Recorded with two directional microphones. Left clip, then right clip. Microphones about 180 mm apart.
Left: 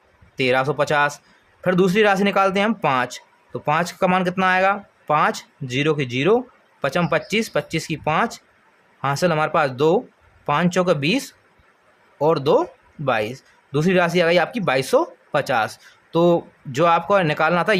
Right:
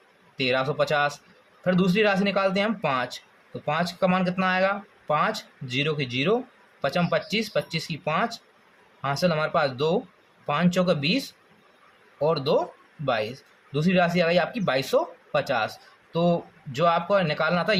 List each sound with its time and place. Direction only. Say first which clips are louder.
0.3 s speech: left 5 dB; 35° left (ahead or behind)